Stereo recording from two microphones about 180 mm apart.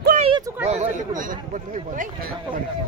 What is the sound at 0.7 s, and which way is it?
Speech, 35° right (ahead or behind).